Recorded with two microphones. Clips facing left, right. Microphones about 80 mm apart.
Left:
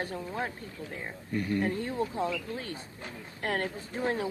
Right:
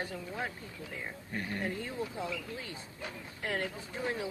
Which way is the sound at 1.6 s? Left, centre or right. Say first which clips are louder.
Left 6 dB; left.